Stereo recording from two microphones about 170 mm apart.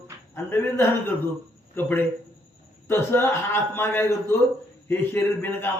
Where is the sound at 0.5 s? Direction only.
10° left (ahead or behind).